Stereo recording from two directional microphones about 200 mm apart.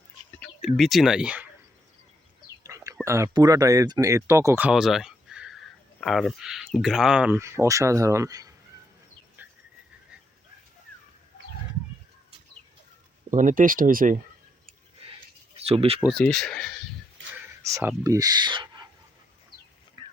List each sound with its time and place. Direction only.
0.3 s speech: 5° left (ahead or behind)
2.6 s speech: 15° right (ahead or behind)
9.4 s bird: 10° right (ahead or behind)
13.3 s speech: 40° right (ahead or behind)
15.5 s speech: 30° right (ahead or behind)
16.0 s speech: 5° left (ahead or behind)
17.6 s speech: 15° right (ahead or behind)